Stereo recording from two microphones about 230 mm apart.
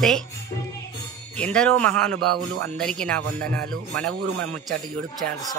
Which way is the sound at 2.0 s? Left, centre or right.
Right.